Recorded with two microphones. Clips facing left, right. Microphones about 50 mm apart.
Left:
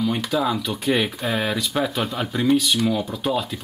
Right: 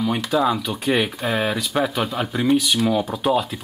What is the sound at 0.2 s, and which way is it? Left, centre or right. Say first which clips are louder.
Speech: right 3 dB; centre.